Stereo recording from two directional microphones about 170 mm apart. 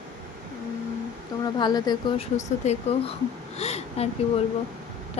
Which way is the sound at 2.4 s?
40° left (ahead or behind).